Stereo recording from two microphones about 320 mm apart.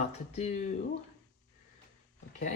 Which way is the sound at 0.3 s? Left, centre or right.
Left.